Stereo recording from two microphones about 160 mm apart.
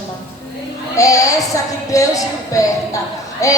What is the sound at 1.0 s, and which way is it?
Speech, 20° left (ahead or behind).